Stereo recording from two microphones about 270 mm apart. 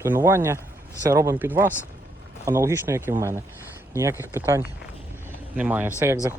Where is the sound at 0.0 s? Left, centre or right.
Centre.